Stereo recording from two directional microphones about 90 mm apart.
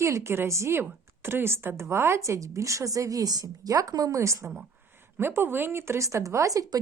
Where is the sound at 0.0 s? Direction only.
30° right (ahead or behind).